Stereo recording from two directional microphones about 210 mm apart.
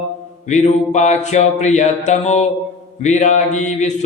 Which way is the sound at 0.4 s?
35° left (ahead or behind).